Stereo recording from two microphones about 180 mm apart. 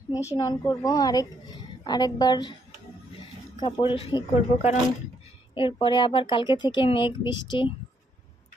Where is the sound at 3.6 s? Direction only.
25° left (ahead or behind).